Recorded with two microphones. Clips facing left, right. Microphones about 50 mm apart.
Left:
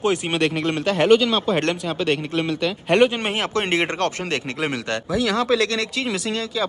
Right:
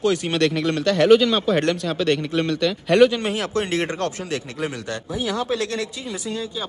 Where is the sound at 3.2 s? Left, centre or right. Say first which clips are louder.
Left 1 dB; left.